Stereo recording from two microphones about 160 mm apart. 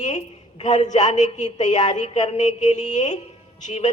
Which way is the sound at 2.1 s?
35° left (ahead or behind).